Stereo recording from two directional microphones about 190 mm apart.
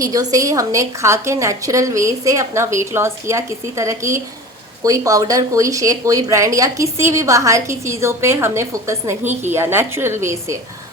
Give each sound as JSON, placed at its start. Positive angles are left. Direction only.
{"t": 0.0, "sound": "speech", "side_deg": -20}